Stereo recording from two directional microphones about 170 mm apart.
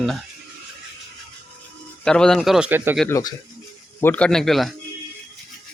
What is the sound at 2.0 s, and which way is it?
Speech, 5° left (ahead or behind).